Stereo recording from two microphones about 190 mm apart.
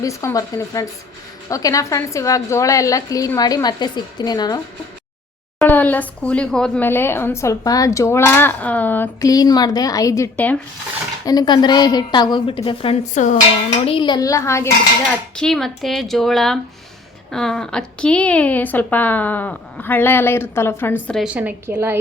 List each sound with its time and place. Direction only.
0.0 s a woman's voice: 15° left (ahead or behind)
5.5 s a woman's voice: 10° left (ahead or behind)
11.3 s a woman's voice: 20° left (ahead or behind); by 13.4 s 40° left (ahead or behind)
13.8 s a woman's voice: 25° left (ahead or behind)
15.4 s a woman's voice: centre (ahead or behind)
21.2 s a woman's voice: 10° right (ahead or behind)